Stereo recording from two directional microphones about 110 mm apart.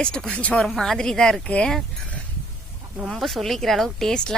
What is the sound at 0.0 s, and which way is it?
A woman's voice, 10° left (ahead or behind).